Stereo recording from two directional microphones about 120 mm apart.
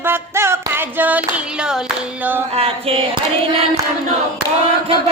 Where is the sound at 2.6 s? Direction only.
55° right (ahead or behind).